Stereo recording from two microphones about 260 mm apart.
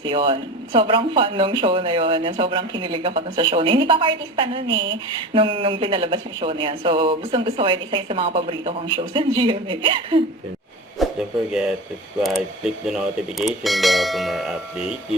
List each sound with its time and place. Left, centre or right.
0.0 s speech: centre
11.0 s a sound: centre
12.2 s speech: centre